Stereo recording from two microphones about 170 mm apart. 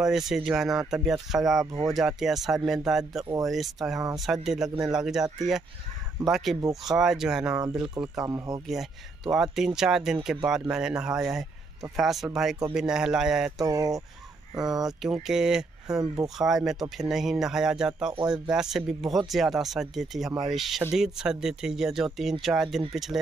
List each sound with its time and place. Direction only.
0.0 s speech: centre (ahead or behind)
1.7 s fowl: 20° right (ahead or behind)
2.0 s speech: centre (ahead or behind)
6.3 s speech: centre (ahead or behind); by 8.5 s 20° right (ahead or behind)
9.3 s speech: centre (ahead or behind)
13.6 s fowl: 20° right (ahead or behind)
14.5 s speech: 20° right (ahead or behind)
14.8 s speech: centre (ahead or behind)